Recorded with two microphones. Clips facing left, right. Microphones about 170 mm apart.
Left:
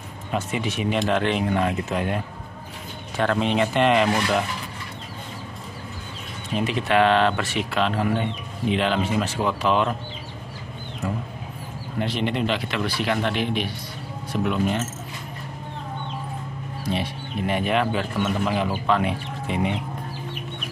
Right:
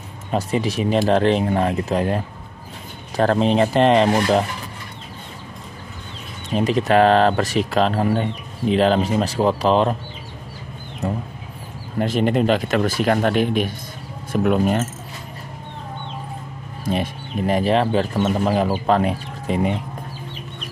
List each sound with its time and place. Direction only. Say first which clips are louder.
0.3 s speech: right 5 dB; 35° right (ahead or behind)
6.5 s speech: right 5 dB; 40° right (ahead or behind)
12.0 s speech: right 6 dB; 40° right (ahead or behind)
16.8 s speech: right 4 dB; 45° right (ahead or behind)